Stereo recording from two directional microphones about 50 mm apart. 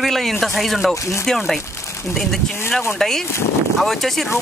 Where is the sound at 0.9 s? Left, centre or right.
Left.